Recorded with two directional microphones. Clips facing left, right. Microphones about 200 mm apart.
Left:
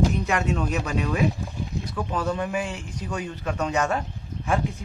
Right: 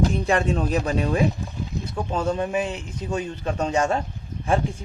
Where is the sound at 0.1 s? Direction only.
30° right (ahead or behind).